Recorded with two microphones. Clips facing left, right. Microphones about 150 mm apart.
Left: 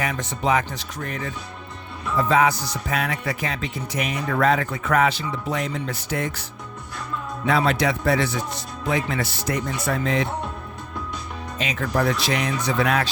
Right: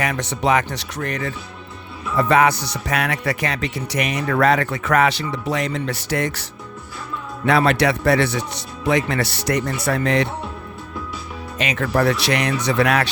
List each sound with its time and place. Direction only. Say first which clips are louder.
0.0 s speech: right 3 dB; 75° right (ahead or behind)
11.5 s speech: right 4 dB; 70° right (ahead or behind)